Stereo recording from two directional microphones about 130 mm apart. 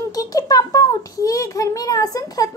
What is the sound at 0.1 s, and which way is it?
A child's voice, 30° left (ahead or behind).